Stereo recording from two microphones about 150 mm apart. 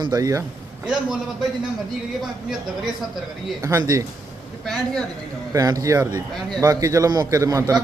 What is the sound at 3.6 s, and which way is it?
Speech, 20° right (ahead or behind).